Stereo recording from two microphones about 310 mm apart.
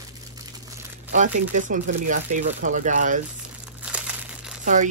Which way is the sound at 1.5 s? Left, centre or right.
Right.